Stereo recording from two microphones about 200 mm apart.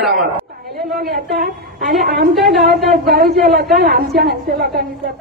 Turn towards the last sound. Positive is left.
turn(degrees=-50)  # may be behind; listen again after turning